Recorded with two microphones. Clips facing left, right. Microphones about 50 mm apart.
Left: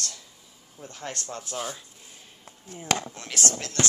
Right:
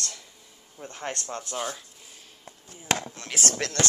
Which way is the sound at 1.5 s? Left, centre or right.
Centre.